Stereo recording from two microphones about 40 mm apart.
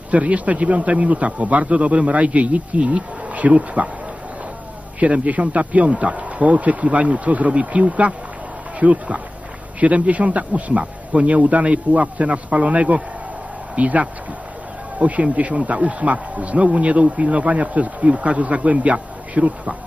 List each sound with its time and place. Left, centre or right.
0.1 s speech: right
5.0 s speech: right